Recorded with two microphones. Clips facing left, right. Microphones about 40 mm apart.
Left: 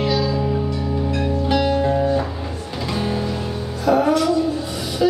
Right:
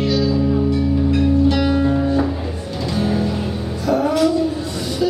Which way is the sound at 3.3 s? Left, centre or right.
Centre.